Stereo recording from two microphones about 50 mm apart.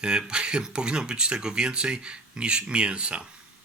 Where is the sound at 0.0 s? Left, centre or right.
Centre.